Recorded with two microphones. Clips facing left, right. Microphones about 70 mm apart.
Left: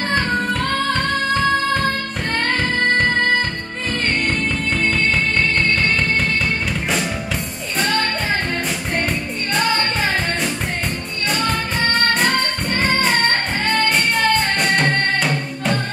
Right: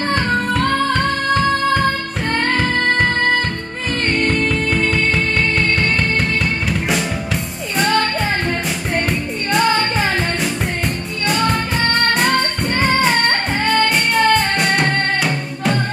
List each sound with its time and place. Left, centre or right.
0.1 s music: centre
4.3 s music: centre
8.9 s music: centre